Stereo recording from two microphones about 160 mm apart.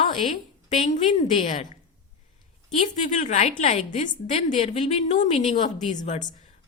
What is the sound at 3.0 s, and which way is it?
A woman's voice, 50° left (ahead or behind).